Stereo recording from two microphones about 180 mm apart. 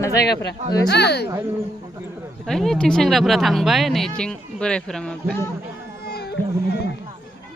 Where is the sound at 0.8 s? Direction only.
70° left (ahead or behind).